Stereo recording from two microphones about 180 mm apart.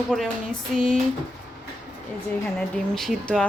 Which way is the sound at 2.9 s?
Centre (ahead or behind).